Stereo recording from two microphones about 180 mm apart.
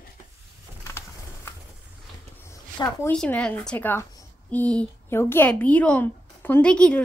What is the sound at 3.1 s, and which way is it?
A woman's voice, 5° left (ahead or behind).